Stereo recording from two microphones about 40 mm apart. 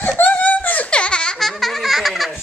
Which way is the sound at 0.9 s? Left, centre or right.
Left.